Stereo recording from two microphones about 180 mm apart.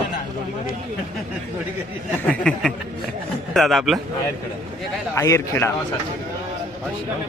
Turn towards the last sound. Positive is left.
turn(degrees=15)  # may be behind; listen again after turning